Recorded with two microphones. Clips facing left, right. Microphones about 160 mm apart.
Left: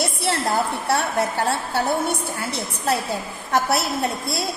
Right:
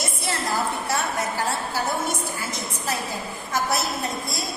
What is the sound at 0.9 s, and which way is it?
A woman's voice, 60° left (ahead or behind).